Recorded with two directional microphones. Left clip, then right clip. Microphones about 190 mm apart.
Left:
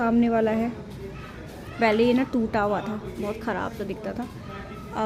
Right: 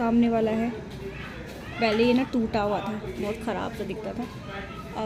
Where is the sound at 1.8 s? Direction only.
15° left (ahead or behind).